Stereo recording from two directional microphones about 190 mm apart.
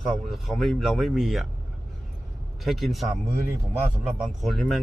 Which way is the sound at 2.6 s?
Centre (ahead or behind).